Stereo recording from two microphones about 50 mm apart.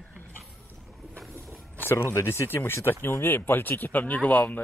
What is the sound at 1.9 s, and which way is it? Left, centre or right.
Speech, left.